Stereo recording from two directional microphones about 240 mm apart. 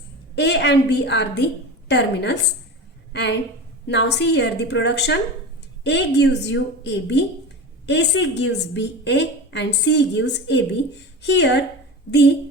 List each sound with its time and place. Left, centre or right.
0.3 s a woman's voice: left